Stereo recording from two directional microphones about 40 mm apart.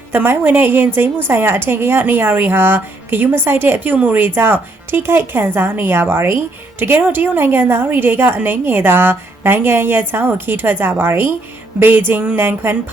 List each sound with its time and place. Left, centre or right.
0.1 s a woman's voice: right
3.9 s a woman's voice: right